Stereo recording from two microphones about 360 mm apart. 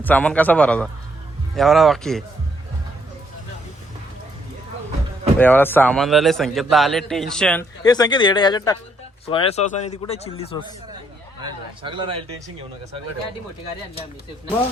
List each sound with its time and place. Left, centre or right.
0.0 s a man's voice: centre
5.4 s a man's voice: centre
11.4 s speech: centre